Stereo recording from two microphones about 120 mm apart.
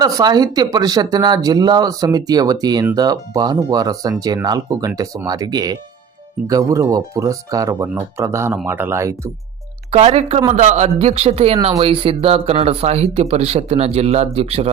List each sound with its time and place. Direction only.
0.0 s speech: 30° right (ahead or behind)
9.9 s speech: 60° right (ahead or behind)
10.5 s speech: 75° right (ahead or behind); by 14.7 s 60° right (ahead or behind)